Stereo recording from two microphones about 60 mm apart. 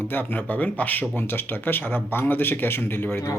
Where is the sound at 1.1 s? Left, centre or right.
Left.